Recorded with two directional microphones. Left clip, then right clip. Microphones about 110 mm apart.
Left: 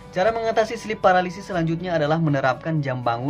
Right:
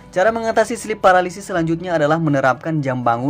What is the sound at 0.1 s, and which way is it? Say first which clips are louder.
Speech: right 4 dB; 45° right (ahead or behind).